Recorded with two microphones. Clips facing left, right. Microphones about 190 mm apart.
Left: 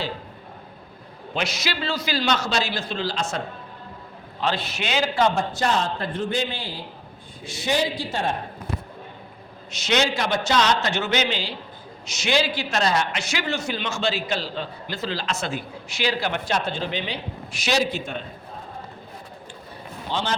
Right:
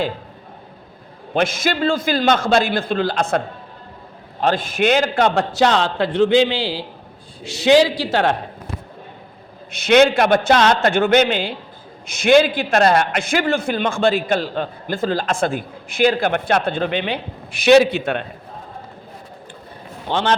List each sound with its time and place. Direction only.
1.3 s a man's voice: 50° right (ahead or behind); by 8.4 s 80° right
9.7 s a man's voice: 55° right (ahead or behind)
20.1 s a man's voice: 60° right (ahead or behind)